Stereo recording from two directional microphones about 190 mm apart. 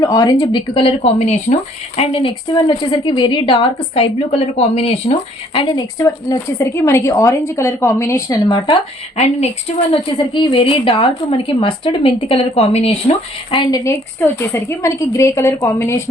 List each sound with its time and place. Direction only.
0.0 s a woman's voice: 20° left (ahead or behind)